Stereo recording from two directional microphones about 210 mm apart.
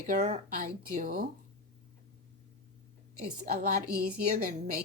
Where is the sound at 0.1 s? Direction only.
35° right (ahead or behind).